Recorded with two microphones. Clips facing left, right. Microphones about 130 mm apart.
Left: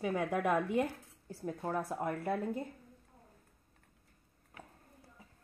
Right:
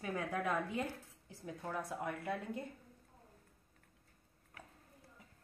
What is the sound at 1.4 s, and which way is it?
Speech, 45° left (ahead or behind).